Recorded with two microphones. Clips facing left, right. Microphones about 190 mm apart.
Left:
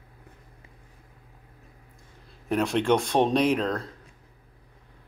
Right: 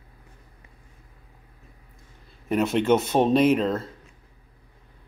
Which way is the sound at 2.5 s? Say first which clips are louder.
Right 2 dB; centre (ahead or behind).